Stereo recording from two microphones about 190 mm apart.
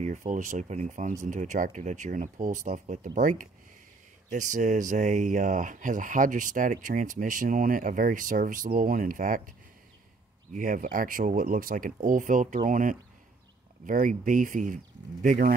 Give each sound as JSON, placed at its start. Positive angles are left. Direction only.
{"t": 0.0, "sound": "speech", "side_deg": -40}
{"t": 10.5, "sound": "speech", "side_deg": -45}